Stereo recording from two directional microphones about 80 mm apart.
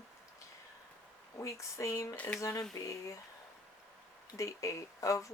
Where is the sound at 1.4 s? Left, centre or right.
Left.